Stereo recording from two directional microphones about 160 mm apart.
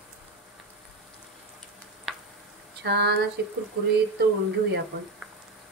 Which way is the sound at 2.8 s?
90° right.